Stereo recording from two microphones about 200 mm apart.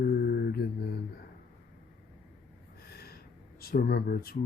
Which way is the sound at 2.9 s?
50° left (ahead or behind).